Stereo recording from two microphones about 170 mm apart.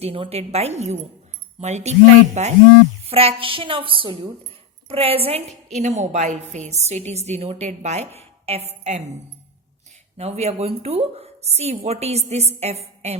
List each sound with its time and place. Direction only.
0.0 s a woman's voice: 35° right (ahead or behind)
10.2 s a woman's voice: 40° right (ahead or behind)